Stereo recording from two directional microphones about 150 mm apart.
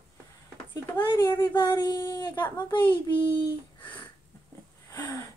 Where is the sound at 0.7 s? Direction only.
25° left (ahead or behind).